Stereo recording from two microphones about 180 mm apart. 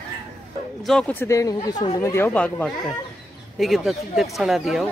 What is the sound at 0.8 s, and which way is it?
Speech, 5° left (ahead or behind).